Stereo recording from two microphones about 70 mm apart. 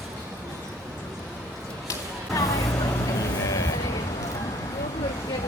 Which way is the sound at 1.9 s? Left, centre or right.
Left.